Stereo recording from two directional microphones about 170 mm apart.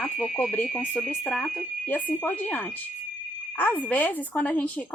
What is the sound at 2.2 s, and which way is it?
A woman's voice, 10° left (ahead or behind).